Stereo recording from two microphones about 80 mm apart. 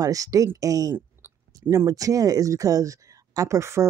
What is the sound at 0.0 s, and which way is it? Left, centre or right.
Speech, right.